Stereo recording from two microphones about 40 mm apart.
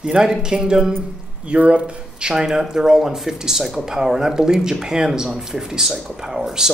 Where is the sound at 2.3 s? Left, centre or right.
Centre.